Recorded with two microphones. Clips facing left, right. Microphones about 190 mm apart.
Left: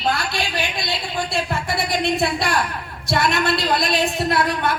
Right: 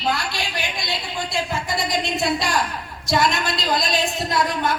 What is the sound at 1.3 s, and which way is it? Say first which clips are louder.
A woman's voice: right 1 dB; 60° left (ahead or behind).